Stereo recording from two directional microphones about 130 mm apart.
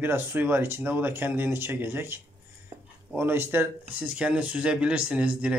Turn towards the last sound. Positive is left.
turn(degrees=-10)  # may be behind; listen again after turning